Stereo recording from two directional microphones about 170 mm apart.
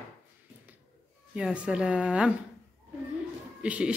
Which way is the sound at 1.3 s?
5° right (ahead or behind).